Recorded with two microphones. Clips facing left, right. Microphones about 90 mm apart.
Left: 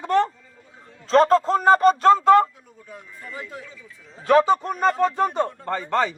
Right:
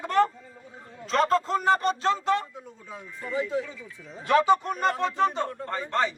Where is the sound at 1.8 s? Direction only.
45° left (ahead or behind).